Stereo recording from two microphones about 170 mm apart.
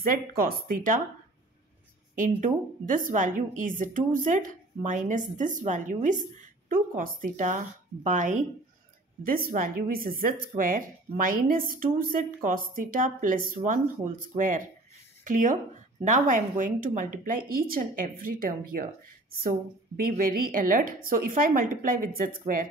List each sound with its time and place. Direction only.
0.0 s speech: 60° right (ahead or behind)
2.1 s a woman's voice: 50° right (ahead or behind)